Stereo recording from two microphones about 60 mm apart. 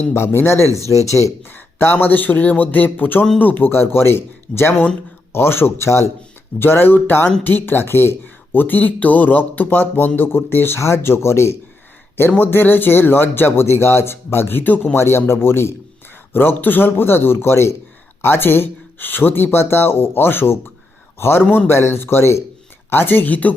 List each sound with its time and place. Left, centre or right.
0.1 s speech: left
1.0 s speech: left
1.5 s speech: left
6.6 s speech: left
12.4 s speech: left
14.9 s speech: left
22.9 s speech: left